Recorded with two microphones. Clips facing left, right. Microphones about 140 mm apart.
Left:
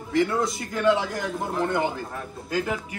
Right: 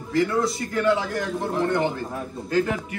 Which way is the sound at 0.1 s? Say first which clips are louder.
Right 1 dB; 20° left (ahead or behind).